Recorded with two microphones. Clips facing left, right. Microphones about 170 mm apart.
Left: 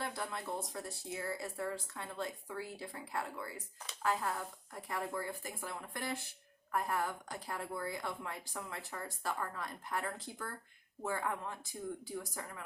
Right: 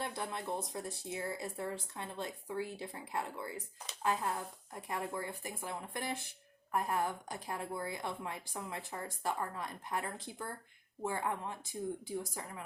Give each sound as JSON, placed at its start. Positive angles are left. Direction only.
{"t": 0.0, "sound": "a woman's voice", "side_deg": -20}